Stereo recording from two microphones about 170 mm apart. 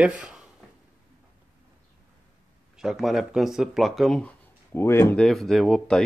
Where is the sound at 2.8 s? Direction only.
Centre (ahead or behind).